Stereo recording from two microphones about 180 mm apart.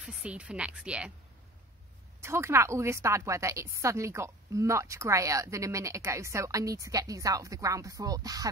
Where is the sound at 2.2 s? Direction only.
15° right (ahead or behind).